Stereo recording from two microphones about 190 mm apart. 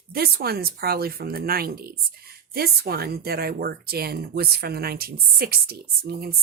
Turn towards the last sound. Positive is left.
turn(degrees=-55)  # may be behind; listen again after turning